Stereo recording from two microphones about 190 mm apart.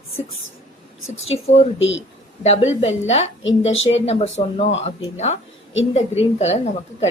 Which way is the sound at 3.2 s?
90° left.